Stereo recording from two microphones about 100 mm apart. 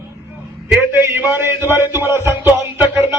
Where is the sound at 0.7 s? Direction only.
20° right (ahead or behind).